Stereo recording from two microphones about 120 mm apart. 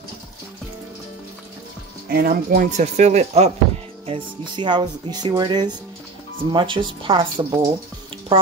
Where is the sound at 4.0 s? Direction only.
45° right (ahead or behind).